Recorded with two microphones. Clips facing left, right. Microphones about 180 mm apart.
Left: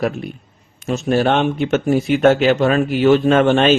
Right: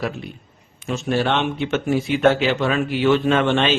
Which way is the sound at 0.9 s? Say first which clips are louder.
Left 5 dB; 40° left (ahead or behind).